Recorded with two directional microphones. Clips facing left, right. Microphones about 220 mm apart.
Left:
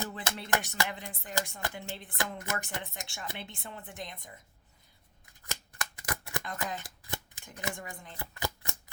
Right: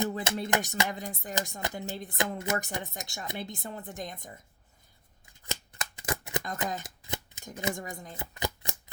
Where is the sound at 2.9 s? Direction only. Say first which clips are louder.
Right 4 dB; 40° right (ahead or behind).